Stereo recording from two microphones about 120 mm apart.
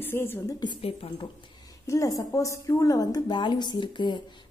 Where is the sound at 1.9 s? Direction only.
25° left (ahead or behind).